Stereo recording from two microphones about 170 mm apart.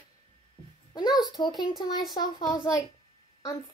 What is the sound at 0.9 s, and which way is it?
A child's voice, 25° left (ahead or behind).